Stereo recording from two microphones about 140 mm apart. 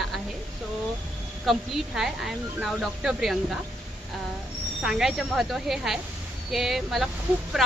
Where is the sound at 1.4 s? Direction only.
Centre (ahead or behind).